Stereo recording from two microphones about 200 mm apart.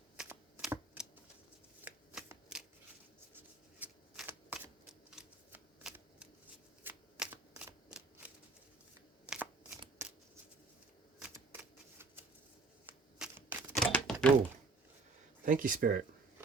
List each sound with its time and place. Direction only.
0.2 s shuffling cards: 5° right (ahead or behind)
11.2 s typewriter: 10° right (ahead or behind)
12.8 s shuffling cards: 5° right (ahead or behind)
13.7 s typewriter: 5° left (ahead or behind)
15.4 s speech: 45° right (ahead or behind)